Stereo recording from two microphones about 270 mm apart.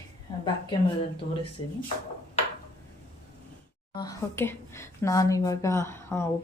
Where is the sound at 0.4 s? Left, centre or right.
Centre.